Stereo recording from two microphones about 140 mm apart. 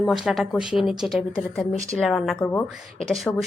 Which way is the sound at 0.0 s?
Centre (ahead or behind).